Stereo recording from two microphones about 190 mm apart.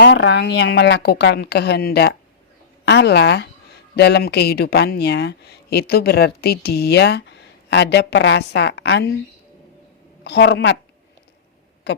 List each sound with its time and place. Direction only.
0.0 s speech: 70° left (ahead or behind)
10.2 s speech: 65° left (ahead or behind)